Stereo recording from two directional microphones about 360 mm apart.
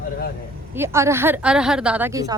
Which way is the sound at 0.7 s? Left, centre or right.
Centre.